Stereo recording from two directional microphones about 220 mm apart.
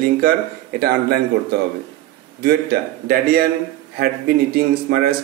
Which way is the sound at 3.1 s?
45° right (ahead or behind).